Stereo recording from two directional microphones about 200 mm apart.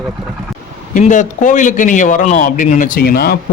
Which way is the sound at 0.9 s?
40° left (ahead or behind).